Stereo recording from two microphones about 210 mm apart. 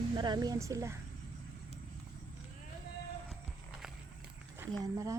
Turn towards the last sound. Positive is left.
turn(degrees=-15)  # may be behind; listen again after turning